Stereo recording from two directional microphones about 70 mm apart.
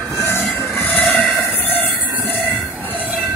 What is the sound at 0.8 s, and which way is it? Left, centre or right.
Train, left.